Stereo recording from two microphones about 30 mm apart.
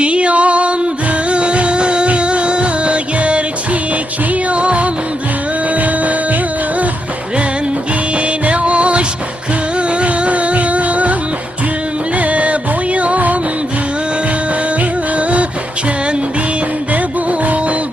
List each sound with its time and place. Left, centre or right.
0.0 s music: right
5.7 s music: right
8.1 s music: right
14.8 s music: right
16.9 s music: right